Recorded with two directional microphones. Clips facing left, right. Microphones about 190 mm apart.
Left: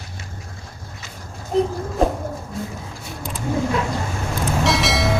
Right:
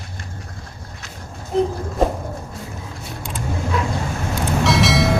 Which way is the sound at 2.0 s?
Centre (ahead or behind).